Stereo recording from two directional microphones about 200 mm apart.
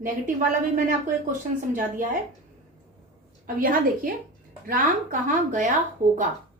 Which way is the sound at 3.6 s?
45° right (ahead or behind).